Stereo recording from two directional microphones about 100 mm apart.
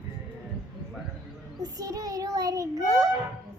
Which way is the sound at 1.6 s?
40° right (ahead or behind).